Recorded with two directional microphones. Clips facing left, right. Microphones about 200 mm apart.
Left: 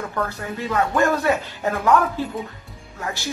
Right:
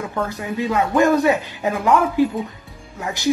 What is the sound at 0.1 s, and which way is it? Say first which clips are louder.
Speech: right 2 dB; 15° right (ahead or behind).